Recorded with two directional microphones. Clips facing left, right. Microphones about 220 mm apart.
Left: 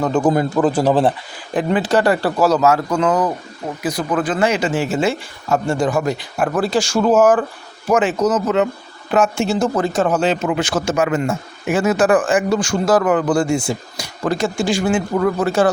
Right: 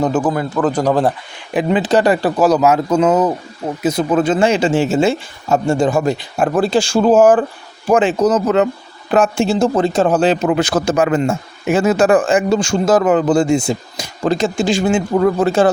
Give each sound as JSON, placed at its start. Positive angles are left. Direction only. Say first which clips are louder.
{"t": 0.5, "sound": "speech", "louder": "even", "side_deg": 10}
{"t": 1.5, "sound": "speech", "louder": "right 2 dB", "side_deg": -20}